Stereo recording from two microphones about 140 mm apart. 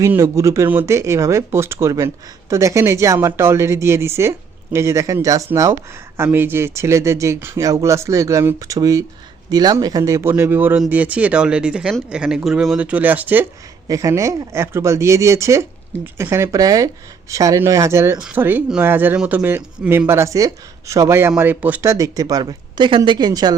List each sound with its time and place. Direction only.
0.0 s a woman's voice: 20° right (ahead or behind)
13.8 s a woman's voice: 25° right (ahead or behind)